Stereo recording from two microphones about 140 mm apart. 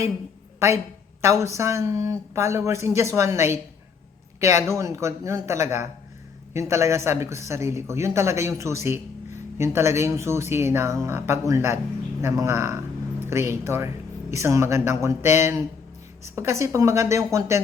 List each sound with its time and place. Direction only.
1.2 s speech: 20° right (ahead or behind)